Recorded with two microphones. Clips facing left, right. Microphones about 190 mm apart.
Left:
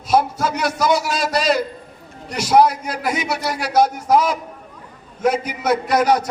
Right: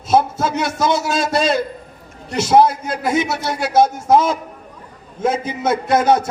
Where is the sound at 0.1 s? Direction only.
25° right (ahead or behind).